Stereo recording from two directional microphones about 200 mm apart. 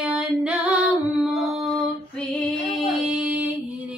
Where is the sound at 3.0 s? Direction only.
5° right (ahead or behind).